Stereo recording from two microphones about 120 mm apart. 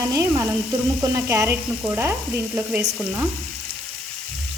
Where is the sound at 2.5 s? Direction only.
10° right (ahead or behind).